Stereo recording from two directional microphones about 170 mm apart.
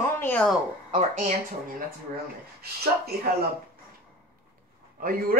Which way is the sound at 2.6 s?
65° right (ahead or behind).